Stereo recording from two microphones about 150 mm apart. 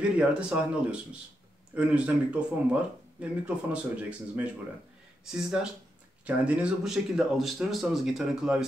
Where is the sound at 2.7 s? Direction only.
10° right (ahead or behind).